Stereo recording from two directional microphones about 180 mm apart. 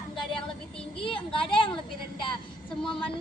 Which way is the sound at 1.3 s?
30° left (ahead or behind).